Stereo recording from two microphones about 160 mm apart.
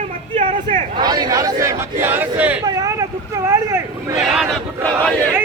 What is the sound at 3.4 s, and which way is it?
Hubbub, 20° right (ahead or behind).